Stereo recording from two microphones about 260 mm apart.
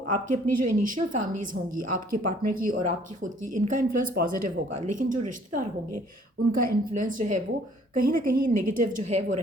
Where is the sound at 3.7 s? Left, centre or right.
Right.